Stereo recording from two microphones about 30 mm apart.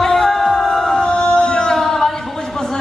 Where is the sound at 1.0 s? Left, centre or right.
Left.